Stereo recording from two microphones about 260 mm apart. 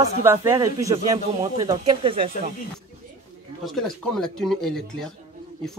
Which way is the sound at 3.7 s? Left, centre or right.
Centre.